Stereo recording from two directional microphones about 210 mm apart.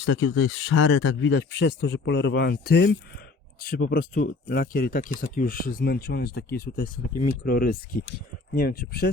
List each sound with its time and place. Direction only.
0.0 s speech: 65° left (ahead or behind); by 9.0 s 45° left (ahead or behind)